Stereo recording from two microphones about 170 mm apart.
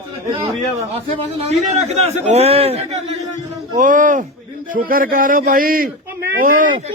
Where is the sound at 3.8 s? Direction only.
50° right (ahead or behind).